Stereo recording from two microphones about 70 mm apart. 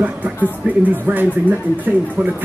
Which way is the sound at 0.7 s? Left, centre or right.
Right.